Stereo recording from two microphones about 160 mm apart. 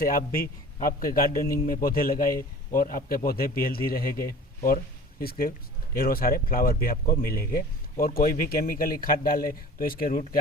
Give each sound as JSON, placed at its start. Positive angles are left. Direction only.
{"t": 0.0, "sound": "speech", "side_deg": 60}
{"t": 5.2, "sound": "speech", "side_deg": 70}